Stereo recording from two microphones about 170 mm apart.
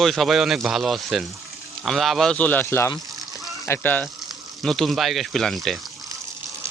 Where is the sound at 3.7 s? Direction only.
10° left (ahead or behind).